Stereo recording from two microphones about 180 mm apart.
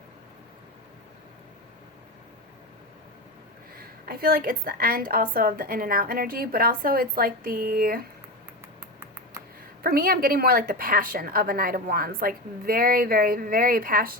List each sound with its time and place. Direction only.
4.0 s a woman's voice: 55° right (ahead or behind)
9.8 s a woman's voice: 55° right (ahead or behind)